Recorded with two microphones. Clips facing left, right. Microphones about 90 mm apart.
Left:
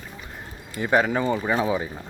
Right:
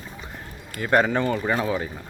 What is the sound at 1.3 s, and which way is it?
Speech, 15° left (ahead or behind).